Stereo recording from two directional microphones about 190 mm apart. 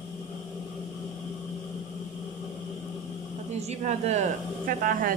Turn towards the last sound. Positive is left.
turn(degrees=-50)  # may be behind; listen again after turning